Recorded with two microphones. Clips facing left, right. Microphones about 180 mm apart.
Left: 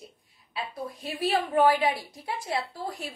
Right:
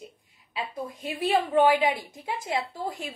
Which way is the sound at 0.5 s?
20° right (ahead or behind).